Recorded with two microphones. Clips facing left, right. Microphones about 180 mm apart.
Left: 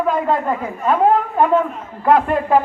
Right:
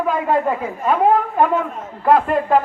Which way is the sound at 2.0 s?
Centre (ahead or behind).